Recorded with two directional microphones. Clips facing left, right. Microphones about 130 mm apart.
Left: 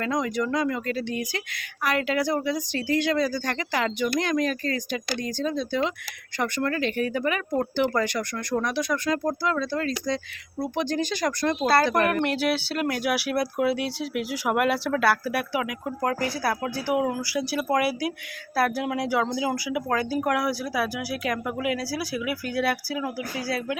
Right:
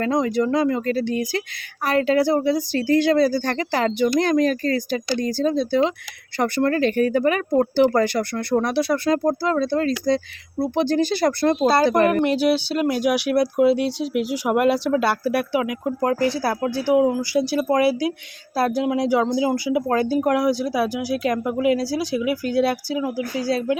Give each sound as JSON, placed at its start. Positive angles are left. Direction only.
{"t": 0.0, "sound": "speech", "side_deg": -30}
{"t": 12.2, "sound": "speech", "side_deg": -15}